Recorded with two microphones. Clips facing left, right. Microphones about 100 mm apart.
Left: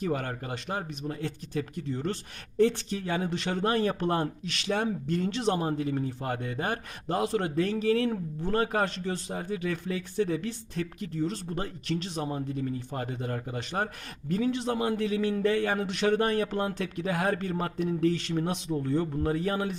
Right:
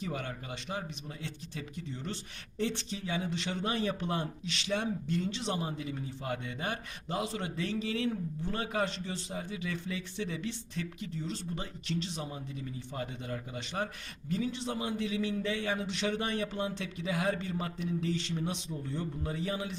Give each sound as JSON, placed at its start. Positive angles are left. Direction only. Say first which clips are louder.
{"t": 0.0, "sound": "speech", "louder": "left 7 dB", "side_deg": 50}